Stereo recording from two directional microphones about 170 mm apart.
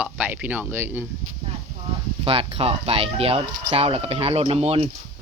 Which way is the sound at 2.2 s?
35° right (ahead or behind).